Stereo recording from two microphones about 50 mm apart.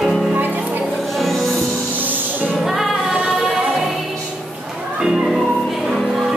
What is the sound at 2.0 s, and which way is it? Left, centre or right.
Music, right.